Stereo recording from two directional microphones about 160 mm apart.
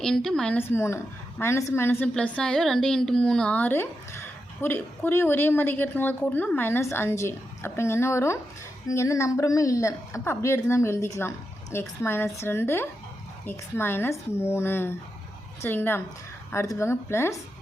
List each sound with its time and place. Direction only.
0.0 s a woman's voice: 5° left (ahead or behind)